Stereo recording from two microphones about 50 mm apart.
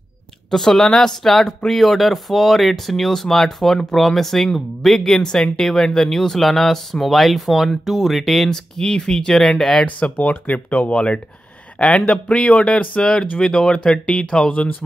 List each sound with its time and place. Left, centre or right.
0.5 s speech: centre
8.5 s speech: centre
9.9 s speech: left